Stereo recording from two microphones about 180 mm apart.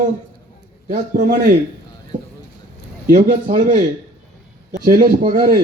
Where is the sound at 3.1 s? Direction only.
50° right (ahead or behind).